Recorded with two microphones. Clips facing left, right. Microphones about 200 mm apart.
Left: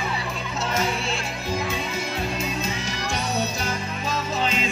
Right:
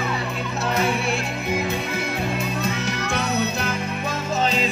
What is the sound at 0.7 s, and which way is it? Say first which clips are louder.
Music: right 4 dB; 60° right (ahead or behind).